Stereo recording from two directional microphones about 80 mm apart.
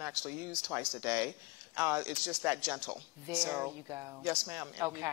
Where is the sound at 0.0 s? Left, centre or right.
Right.